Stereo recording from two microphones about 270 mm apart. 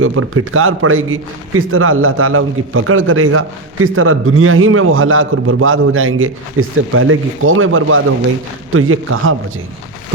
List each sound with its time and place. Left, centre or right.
0.0 s a man's voice: right